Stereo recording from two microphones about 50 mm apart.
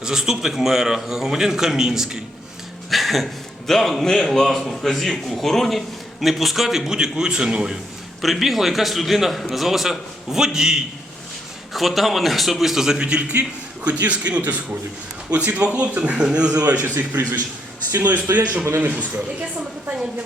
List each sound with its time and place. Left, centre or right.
0.0 s a man's voice: centre
8.2 s a man's voice: centre
11.7 s a man's voice: centre
13.0 s a man's voice: right
16.8 s a man's voice: right